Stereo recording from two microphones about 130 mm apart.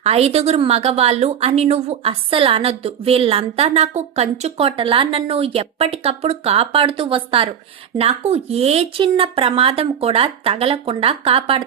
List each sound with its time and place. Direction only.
0.0 s a woman's voice: 50° right (ahead or behind)